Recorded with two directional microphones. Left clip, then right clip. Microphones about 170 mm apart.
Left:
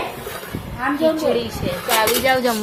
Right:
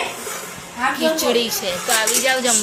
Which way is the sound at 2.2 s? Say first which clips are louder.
Left 1 dB; 25° left (ahead or behind).